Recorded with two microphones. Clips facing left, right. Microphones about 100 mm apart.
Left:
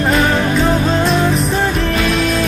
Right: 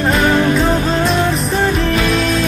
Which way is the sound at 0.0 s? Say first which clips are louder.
Right 1 dB; centre (ahead or behind).